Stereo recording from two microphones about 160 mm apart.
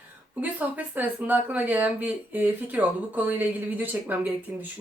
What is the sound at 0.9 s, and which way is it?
Speech, 10° right (ahead or behind).